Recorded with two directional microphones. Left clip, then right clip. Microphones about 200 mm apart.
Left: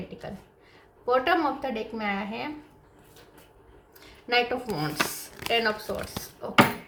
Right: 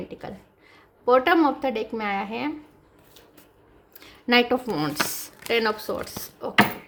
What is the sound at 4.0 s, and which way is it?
A woman's voice, 55° right (ahead or behind).